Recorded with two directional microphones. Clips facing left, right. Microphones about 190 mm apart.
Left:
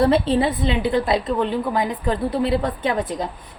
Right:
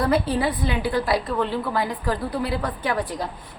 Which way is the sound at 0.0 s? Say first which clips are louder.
Left 4 dB; 25° left (ahead or behind).